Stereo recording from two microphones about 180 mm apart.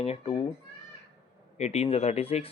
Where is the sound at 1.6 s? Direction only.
35° left (ahead or behind).